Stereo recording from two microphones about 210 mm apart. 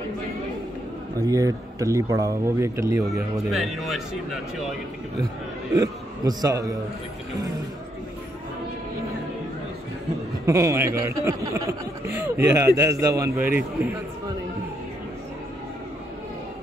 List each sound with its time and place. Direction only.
1.2 s speech: 15° right (ahead or behind)
3.5 s speech: centre (ahead or behind)
5.8 s speech: 15° right (ahead or behind)
10.4 s speech: 15° right (ahead or behind)